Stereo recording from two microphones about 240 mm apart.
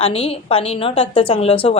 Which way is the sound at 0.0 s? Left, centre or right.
Left.